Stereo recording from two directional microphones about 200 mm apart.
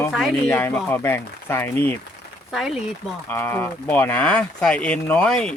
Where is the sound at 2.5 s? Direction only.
Centre (ahead or behind).